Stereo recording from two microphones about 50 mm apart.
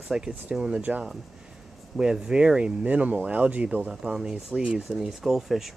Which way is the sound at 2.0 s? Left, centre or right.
Centre.